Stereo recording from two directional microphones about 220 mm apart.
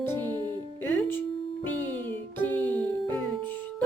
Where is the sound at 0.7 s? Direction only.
5° left (ahead or behind).